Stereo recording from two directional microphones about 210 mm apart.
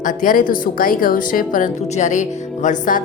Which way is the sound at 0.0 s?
40° left (ahead or behind).